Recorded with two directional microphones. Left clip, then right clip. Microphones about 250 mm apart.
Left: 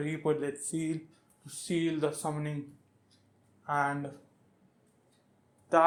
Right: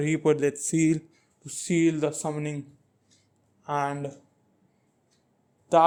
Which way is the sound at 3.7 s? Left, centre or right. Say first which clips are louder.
Right 2 dB; right.